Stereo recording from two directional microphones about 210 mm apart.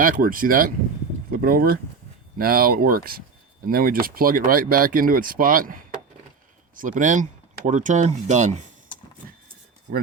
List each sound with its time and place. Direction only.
0.0 s speech: 40° right (ahead or behind)